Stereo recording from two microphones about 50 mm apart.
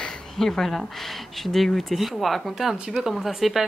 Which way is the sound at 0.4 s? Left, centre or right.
Centre.